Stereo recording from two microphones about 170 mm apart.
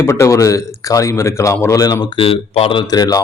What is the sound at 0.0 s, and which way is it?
A man's voice, 15° left (ahead or behind).